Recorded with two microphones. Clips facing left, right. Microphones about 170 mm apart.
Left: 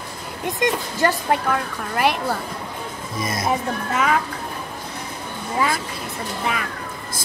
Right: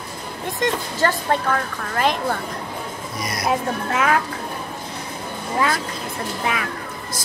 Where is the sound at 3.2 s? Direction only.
25° left (ahead or behind).